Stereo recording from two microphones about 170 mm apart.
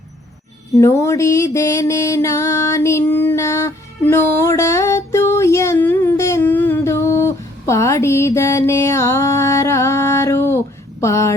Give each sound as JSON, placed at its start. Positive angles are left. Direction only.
{"t": 0.8, "sound": "music", "side_deg": 15}
{"t": 11.0, "sound": "a woman's voice", "side_deg": 15}